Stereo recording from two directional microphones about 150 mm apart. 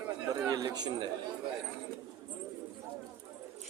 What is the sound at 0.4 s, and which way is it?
Speech, 25° right (ahead or behind).